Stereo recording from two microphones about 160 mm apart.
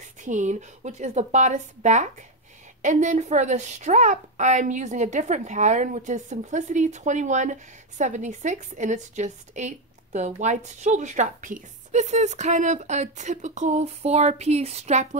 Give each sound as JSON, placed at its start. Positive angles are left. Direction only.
{"t": 0.0, "sound": "a woman's voice", "side_deg": -50}